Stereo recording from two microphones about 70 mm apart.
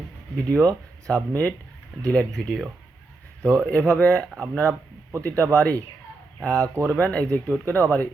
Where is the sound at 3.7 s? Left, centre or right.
Centre.